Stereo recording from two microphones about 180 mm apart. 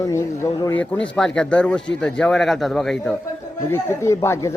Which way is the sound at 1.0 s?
5° left (ahead or behind).